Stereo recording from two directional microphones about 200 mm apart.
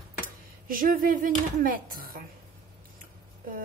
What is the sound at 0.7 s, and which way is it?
Speech, 45° right (ahead or behind).